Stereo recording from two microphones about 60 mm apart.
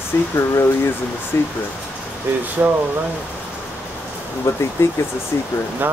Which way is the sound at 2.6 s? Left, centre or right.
Right.